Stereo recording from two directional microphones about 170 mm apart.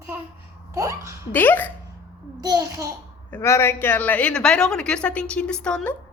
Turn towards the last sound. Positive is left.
turn(degrees=5)  # may be behind; listen again after turning